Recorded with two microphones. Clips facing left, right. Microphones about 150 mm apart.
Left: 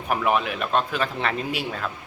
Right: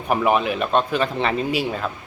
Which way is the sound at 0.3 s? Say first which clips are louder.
Right 3 dB; centre (ahead or behind).